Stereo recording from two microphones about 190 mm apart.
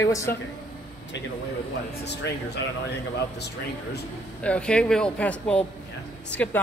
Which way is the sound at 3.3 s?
60° left (ahead or behind).